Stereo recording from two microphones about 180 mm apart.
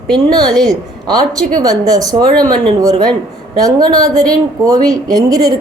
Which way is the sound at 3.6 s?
20° right (ahead or behind).